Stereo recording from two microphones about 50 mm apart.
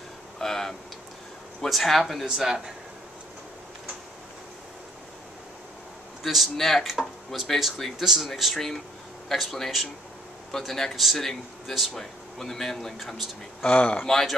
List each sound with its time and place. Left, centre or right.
0.4 s tick: centre
1.6 s speech: centre
6.2 s speech: centre
13.7 s speech: left